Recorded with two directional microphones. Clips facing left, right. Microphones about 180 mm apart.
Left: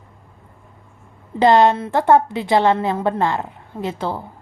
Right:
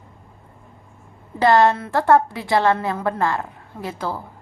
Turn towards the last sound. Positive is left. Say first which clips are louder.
# left 3 dB
turn(degrees=25)  # may be behind; listen again after turning